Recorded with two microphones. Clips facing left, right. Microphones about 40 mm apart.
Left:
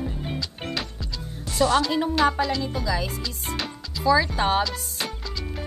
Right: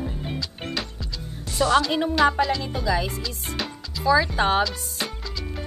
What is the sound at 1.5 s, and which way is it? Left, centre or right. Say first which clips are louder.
Speech: right 1 dB; right.